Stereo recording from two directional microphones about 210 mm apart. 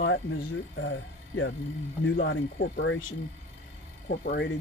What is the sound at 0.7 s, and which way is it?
Speech, 60° left (ahead or behind).